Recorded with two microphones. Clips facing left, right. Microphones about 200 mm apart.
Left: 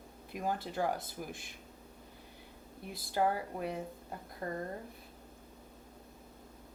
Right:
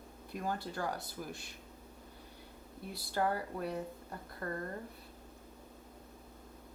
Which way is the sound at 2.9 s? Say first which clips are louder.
Left 1 dB; 50° left (ahead or behind).